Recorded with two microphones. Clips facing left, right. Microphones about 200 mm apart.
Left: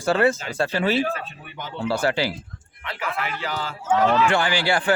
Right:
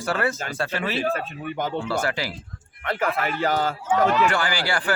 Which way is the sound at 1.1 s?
45° right (ahead or behind).